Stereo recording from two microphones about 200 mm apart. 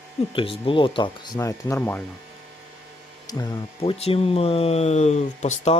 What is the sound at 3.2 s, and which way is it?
Speech, 15° left (ahead or behind).